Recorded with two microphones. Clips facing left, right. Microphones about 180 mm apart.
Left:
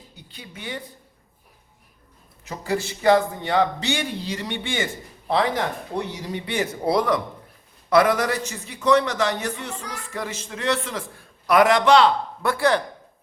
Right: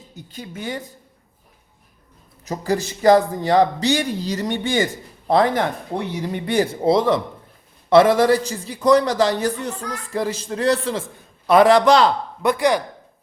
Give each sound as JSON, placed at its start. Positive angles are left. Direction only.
{"t": 0.1, "sound": "speech", "side_deg": -45}
{"t": 2.4, "sound": "speech", "side_deg": -40}
{"t": 6.8, "sound": "a man's voice", "side_deg": -25}
{"t": 12.4, "sound": "speech", "side_deg": -20}